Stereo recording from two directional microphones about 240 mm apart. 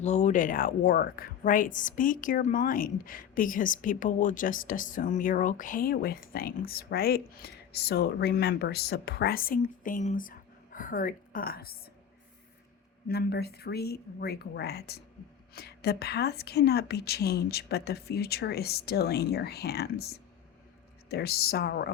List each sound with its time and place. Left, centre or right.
0.0 s a woman's voice: left
13.1 s a woman's voice: left
21.1 s speech: left